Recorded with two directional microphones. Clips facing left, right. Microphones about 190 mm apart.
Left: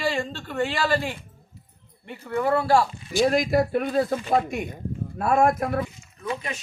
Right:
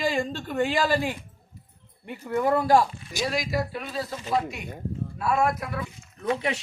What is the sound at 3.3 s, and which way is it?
Speech, 55° left (ahead or behind).